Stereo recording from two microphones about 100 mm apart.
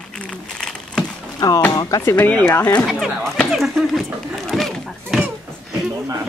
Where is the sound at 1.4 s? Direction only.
40° left (ahead or behind).